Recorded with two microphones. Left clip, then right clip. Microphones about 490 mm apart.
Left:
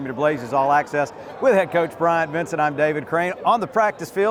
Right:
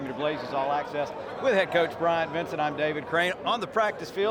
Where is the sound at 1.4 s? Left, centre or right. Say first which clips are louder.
Left 6 dB; left.